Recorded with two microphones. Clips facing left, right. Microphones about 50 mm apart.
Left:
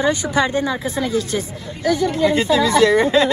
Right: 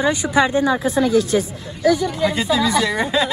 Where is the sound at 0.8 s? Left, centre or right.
Right.